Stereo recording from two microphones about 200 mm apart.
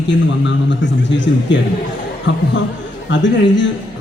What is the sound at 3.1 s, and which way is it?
Speech, 65° left (ahead or behind).